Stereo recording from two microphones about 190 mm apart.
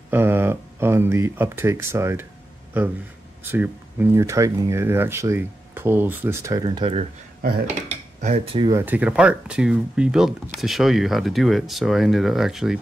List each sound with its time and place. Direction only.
0.1 s speech: 10° right (ahead or behind); by 8.4 s 35° right (ahead or behind)
8.5 s speech: 15° right (ahead or behind)